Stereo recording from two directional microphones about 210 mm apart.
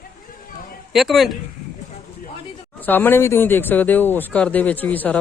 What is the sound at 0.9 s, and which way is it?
Speech, centre (ahead or behind).